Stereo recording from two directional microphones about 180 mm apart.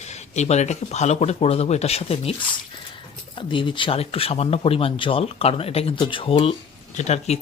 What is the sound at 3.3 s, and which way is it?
Speech, 25° left (ahead or behind).